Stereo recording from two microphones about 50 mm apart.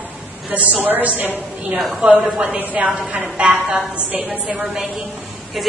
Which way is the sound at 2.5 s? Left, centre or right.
Right.